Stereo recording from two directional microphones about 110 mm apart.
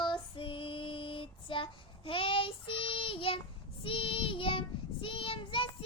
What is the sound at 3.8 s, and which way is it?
Child singing, 55° left (ahead or behind).